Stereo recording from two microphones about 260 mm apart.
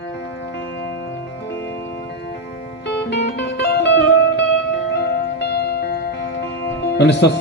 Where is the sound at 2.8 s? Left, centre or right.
Left.